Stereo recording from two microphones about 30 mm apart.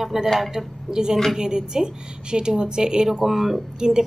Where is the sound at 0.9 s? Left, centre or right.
Right.